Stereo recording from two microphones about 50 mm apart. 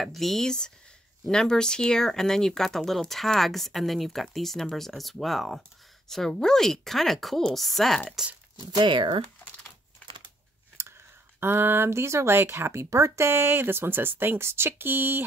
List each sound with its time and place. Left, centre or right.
0.0 s a woman's voice: centre
10.8 s a sound: right
11.3 s speech: right
12.9 s speech: right